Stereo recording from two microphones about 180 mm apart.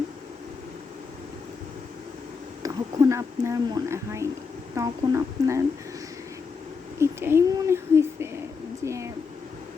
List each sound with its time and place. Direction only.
2.6 s speech: 20° right (ahead or behind)
7.0 s speech: 15° right (ahead or behind)